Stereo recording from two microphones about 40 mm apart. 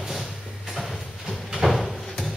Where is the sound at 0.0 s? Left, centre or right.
Centre.